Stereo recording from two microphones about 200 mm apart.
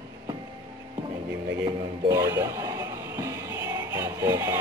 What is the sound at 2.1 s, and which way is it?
Music, 15° right (ahead or behind).